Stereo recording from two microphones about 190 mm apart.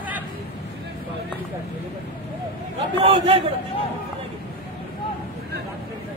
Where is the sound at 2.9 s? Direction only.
30° right (ahead or behind).